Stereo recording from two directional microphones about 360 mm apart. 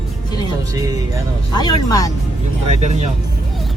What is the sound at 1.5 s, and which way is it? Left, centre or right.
Speech, centre.